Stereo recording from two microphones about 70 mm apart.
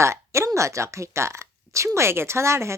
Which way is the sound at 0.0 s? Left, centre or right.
Right.